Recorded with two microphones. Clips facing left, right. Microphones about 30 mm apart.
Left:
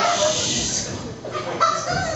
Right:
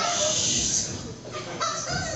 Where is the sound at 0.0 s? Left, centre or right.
Left.